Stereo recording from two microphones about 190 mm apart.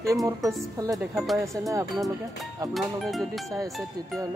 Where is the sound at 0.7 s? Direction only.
20° right (ahead or behind).